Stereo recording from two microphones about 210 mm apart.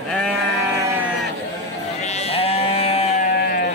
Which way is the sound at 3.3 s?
45° left (ahead or behind).